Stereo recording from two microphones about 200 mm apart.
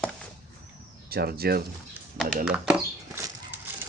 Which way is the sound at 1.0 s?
50° right (ahead or behind).